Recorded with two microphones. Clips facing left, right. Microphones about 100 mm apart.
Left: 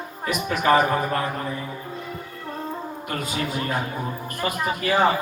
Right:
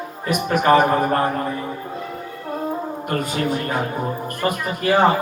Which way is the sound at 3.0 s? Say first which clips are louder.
Right 6 dB; 45° right (ahead or behind).